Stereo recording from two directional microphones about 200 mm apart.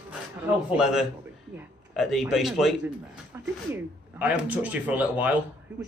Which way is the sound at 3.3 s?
10° right (ahead or behind).